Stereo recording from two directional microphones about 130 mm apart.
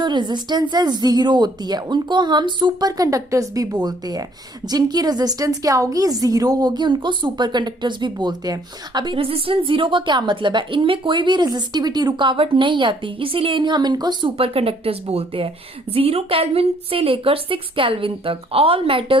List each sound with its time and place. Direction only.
0.0 s a woman's voice: 35° right (ahead or behind)